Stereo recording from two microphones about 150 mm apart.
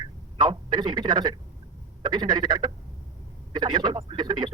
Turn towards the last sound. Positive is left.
turn(degrees=-30)  # may be behind; listen again after turning